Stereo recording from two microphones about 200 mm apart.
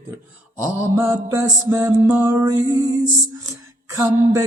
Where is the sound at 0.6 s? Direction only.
15° right (ahead or behind).